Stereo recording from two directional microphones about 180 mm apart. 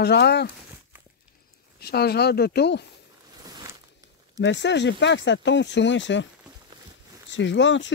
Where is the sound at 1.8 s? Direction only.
60° left (ahead or behind).